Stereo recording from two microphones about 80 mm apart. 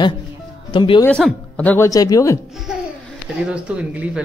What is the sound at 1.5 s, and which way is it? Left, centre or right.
Speech, centre.